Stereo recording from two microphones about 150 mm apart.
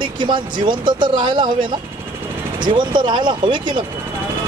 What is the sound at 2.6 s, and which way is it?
Speech, 30° right (ahead or behind).